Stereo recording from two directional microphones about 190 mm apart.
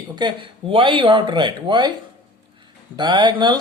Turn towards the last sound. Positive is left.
turn(degrees=-25)  # may be behind; listen again after turning